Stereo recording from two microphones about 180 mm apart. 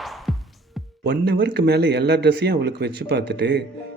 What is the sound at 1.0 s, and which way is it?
Speech, 65° right (ahead or behind).